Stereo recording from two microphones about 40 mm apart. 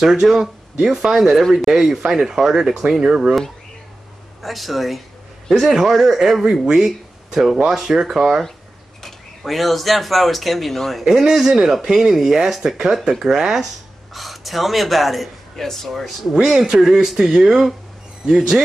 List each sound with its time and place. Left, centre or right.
0.0 s speech: centre
4.4 s a man's voice: centre
6.4 s speech: right
6.7 s speech: centre
8.2 s a man's voice: centre
11.1 s speech: centre
13.2 s speech: right
14.1 s a man's voice: centre
16.4 s speech: centre